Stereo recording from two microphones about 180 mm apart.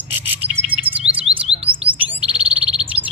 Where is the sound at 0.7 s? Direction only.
10° left (ahead or behind).